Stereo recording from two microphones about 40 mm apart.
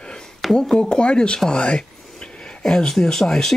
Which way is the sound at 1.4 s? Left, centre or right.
Left.